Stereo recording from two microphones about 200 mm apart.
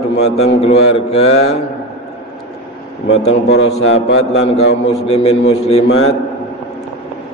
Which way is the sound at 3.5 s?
70° left (ahead or behind).